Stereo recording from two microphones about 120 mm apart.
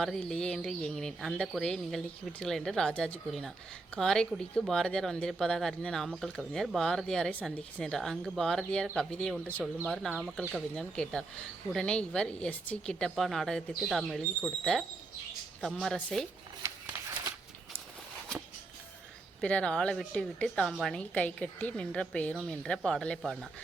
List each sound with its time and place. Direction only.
0.0 s a woman's voice: 5° left (ahead or behind)
16.6 s a sound: 25° right (ahead or behind)
19.4 s a woman's voice: 10° left (ahead or behind)